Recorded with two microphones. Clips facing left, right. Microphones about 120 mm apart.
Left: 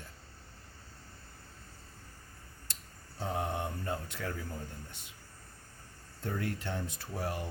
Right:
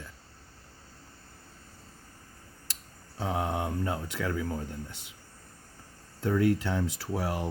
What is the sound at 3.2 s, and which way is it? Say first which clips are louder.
Speech: right 4 dB; 90° right.